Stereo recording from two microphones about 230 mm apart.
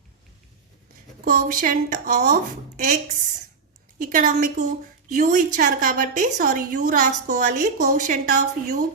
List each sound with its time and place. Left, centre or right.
1.2 s a woman's voice: right